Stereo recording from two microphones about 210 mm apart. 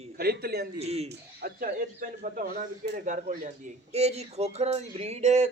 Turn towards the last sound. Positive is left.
turn(degrees=-30)  # may be behind; listen again after turning